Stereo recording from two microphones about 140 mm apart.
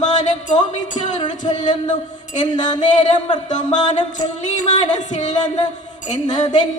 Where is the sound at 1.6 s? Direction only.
60° left (ahead or behind).